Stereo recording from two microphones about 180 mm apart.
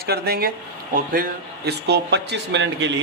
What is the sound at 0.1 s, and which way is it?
A man's voice, 60° right (ahead or behind).